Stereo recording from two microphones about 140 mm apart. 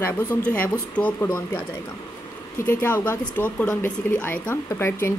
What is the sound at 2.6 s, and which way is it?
Speech, 15° left (ahead or behind).